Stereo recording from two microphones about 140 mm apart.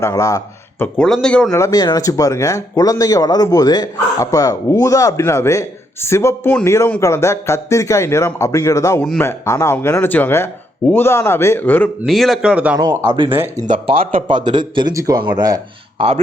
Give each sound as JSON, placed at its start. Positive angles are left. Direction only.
{"t": 0.0, "sound": "speech", "side_deg": 25}
{"t": 0.9, "sound": "speech", "side_deg": 5}
{"t": 1.5, "sound": "a man's voice", "side_deg": 25}
{"t": 12.0, "sound": "speech", "side_deg": 0}
{"t": 12.8, "sound": "a man's voice", "side_deg": -30}
{"t": 13.9, "sound": "a man's voice", "side_deg": -90}
{"t": 14.2, "sound": "a man's voice", "side_deg": -35}